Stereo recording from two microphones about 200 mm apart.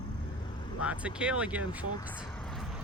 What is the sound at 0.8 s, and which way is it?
Speech, 5° right (ahead or behind).